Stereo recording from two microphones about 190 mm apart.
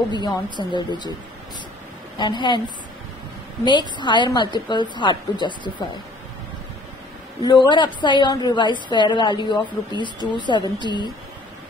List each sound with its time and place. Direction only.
0.1 s a woman's voice: 25° left (ahead or behind)
2.1 s a woman's voice: 25° left (ahead or behind)
3.6 s a woman's voice: 25° left (ahead or behind)
7.4 s a woman's voice: 25° left (ahead or behind)